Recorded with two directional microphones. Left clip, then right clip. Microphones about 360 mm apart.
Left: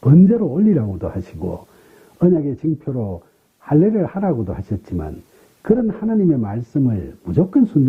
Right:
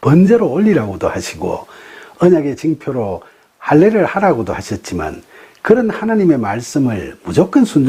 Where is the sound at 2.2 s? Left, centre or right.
Centre.